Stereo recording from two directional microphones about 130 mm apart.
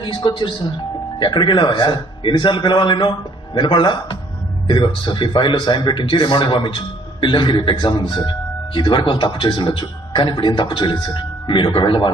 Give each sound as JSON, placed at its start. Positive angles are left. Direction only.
{"t": 0.0, "sound": "speech", "side_deg": 40}